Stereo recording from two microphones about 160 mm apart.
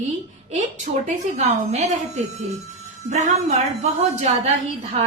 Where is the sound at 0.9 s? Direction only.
55° right (ahead or behind).